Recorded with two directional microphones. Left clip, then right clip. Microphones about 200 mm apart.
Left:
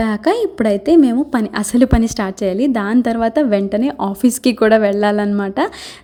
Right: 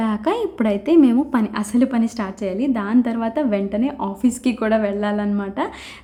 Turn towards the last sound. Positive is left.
turn(degrees=30)  # may be behind; listen again after turning